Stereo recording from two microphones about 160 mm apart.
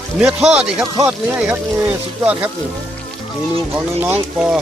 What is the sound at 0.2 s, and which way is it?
Speech, 5° right (ahead or behind).